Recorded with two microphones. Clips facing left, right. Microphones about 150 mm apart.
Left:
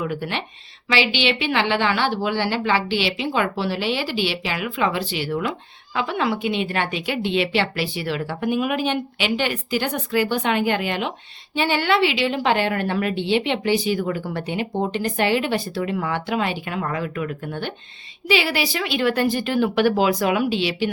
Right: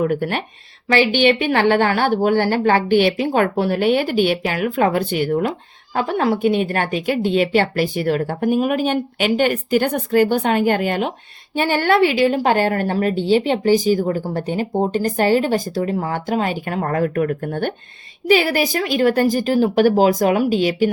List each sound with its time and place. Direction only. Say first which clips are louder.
0.0 s a woman's voice: right 7 dB; 50° right (ahead or behind)